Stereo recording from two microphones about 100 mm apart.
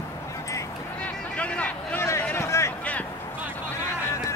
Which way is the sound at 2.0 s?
30° left (ahead or behind).